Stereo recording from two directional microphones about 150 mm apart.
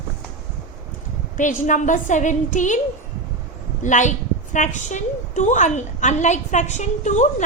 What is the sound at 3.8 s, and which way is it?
A woman's voice, 55° left (ahead or behind).